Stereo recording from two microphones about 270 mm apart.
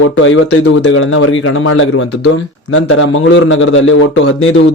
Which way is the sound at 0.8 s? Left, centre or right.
Left.